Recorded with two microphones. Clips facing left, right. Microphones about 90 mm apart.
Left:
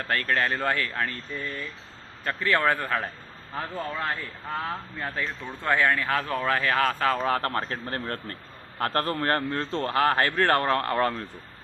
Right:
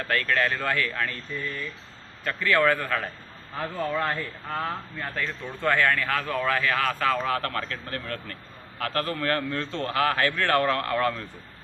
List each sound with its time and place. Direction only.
0.1 s a man's voice: 35° left (ahead or behind)
2.2 s a man's voice: 30° left (ahead or behind)
3.9 s a man's voice: 10° left (ahead or behind); by 11.3 s 35° left (ahead or behind)